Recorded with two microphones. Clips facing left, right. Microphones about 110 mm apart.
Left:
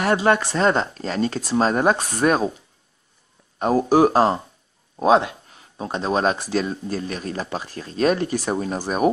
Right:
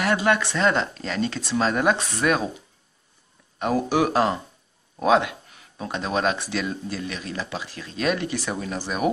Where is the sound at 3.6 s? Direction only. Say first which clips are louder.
Left 5 dB; 35° left (ahead or behind).